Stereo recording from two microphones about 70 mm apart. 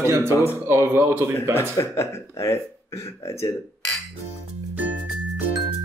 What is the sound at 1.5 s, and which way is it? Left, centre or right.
Speech, left.